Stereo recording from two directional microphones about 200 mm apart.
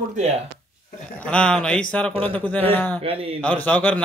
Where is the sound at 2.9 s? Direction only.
30° right (ahead or behind).